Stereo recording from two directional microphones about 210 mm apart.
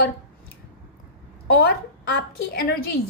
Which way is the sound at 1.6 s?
50° left (ahead or behind).